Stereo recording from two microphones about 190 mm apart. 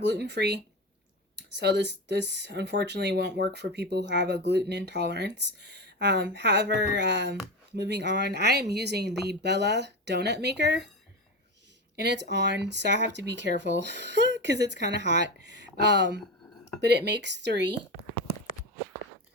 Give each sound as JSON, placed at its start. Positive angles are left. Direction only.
{"t": 0.0, "sound": "speech", "side_deg": -65}
{"t": 11.9, "sound": "speech", "side_deg": -65}